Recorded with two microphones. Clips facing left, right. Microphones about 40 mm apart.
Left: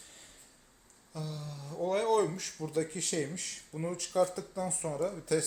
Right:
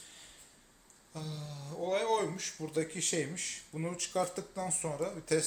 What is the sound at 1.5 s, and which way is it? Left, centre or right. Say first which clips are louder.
Speech: left 1 dB; right.